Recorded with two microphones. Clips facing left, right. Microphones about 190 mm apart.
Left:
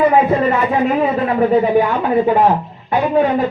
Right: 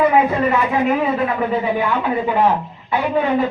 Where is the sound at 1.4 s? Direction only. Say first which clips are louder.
Left 6 dB; 45° left (ahead or behind).